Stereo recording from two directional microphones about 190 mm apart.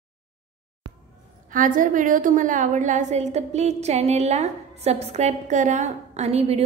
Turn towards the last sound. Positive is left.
turn(degrees=-35)  # may be behind; listen again after turning